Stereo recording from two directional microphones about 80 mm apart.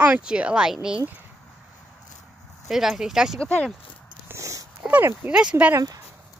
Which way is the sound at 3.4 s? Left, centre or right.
Centre.